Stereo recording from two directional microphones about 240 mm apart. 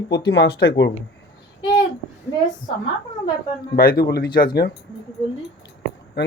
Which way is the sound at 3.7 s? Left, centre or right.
Left.